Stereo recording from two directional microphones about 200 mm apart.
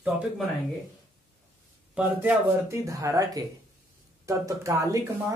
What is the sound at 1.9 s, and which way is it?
Speech, 10° right (ahead or behind).